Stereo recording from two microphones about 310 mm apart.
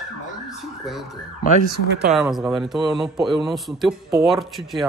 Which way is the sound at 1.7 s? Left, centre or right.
Right.